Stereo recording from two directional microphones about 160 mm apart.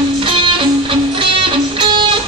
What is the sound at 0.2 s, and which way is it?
Music, 35° right (ahead or behind).